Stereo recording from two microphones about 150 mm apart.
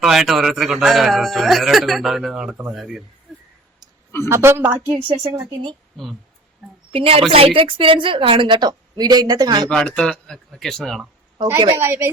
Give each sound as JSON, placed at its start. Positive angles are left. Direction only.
{"t": 0.0, "sound": "speech", "side_deg": 0}
{"t": 4.3, "sound": "a woman's voice", "side_deg": -15}
{"t": 4.9, "sound": "speech", "side_deg": -35}
{"t": 6.9, "sound": "speech", "side_deg": -40}
{"t": 9.6, "sound": "speech", "side_deg": 5}
{"t": 11.8, "sound": "a woman's voice", "side_deg": -15}